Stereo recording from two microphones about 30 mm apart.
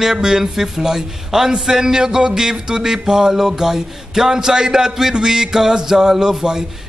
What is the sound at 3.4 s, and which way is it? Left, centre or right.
Music, centre.